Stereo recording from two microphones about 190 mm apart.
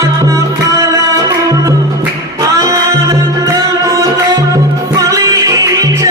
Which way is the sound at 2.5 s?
15° right (ahead or behind).